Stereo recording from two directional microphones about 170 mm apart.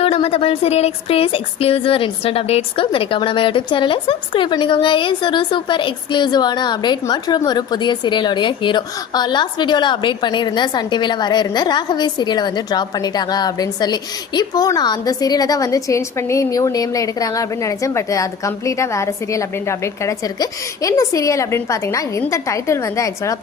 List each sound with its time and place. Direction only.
0.0 s speech: 35° left (ahead or behind); by 23.4 s 20° left (ahead or behind)